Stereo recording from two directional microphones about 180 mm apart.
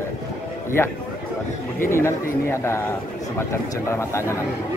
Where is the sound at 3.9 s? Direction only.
15° left (ahead or behind).